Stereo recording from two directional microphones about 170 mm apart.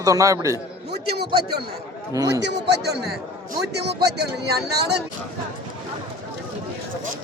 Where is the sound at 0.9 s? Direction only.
70° right (ahead or behind).